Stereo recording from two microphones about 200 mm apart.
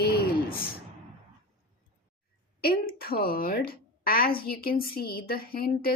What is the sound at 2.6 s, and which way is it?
Speech, 50° left (ahead or behind).